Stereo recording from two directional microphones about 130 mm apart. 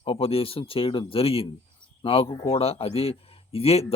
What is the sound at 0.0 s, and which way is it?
Speech, 45° left (ahead or behind).